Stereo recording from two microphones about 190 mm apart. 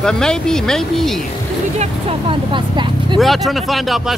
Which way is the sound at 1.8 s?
30° right (ahead or behind).